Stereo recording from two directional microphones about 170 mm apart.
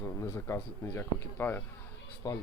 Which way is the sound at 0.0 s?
15° left (ahead or behind).